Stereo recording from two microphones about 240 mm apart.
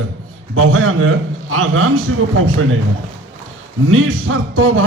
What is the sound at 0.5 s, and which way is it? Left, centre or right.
A man's voice, right.